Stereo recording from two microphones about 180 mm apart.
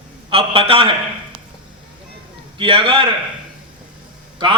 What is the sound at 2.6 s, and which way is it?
Speech, 30° right (ahead or behind).